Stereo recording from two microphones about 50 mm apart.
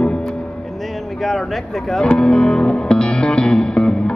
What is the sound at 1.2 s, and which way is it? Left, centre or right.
Speech, centre.